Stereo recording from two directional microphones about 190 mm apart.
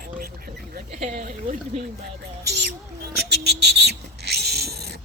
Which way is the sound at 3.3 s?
60° right (ahead or behind).